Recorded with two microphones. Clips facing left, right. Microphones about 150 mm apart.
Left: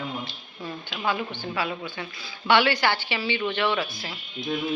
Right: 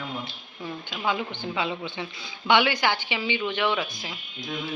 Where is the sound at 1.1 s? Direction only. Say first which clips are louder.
Even; 15° right (ahead or behind).